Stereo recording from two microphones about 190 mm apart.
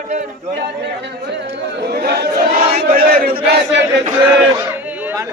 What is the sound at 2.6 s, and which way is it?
Battle cry, 30° right (ahead or behind).